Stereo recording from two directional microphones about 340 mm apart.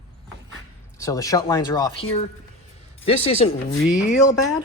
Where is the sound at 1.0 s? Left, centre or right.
Centre.